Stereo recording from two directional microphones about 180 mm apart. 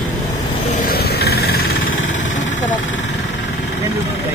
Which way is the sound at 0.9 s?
60° left (ahead or behind).